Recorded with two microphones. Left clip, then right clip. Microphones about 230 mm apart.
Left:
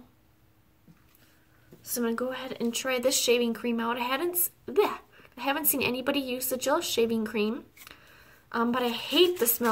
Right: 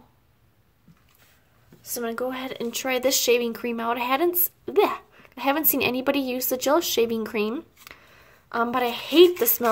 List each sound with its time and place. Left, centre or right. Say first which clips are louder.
2.0 s speech: right 2 dB; right